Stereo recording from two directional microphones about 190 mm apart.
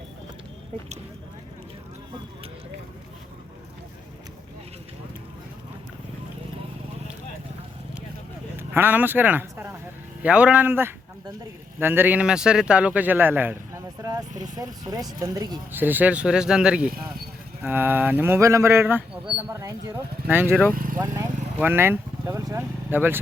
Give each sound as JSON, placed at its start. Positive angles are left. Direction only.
{"t": 8.5, "sound": "speech", "side_deg": -10}
{"t": 14.0, "sound": "vehicle", "side_deg": -20}
{"t": 14.5, "sound": "speech", "side_deg": -20}
{"t": 20.7, "sound": "vehicle", "side_deg": -45}
{"t": 21.6, "sound": "speech", "side_deg": -10}